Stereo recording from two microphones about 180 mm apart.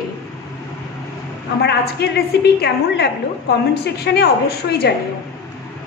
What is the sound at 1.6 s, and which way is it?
A woman's voice, 65° left (ahead or behind).